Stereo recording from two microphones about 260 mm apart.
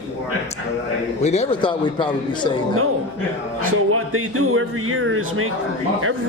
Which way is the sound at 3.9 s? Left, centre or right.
Right.